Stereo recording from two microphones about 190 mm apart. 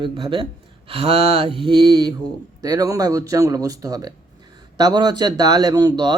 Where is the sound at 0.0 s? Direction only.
25° right (ahead or behind).